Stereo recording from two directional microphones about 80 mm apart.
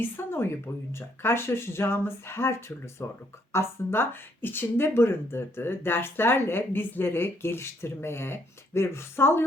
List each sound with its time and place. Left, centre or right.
0.0 s speech: left